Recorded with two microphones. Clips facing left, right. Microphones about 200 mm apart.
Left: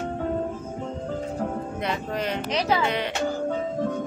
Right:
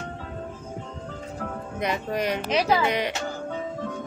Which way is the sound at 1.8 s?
15° right (ahead or behind).